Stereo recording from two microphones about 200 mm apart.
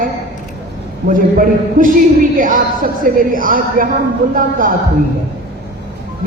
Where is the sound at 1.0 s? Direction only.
45° right (ahead or behind).